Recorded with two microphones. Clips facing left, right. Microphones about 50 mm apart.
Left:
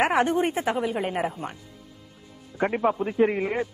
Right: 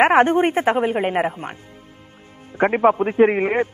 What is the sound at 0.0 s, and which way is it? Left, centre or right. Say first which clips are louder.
A man's voice: right 7 dB; right.